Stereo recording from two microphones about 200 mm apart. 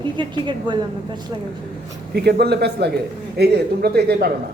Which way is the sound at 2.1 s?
55° right (ahead or behind).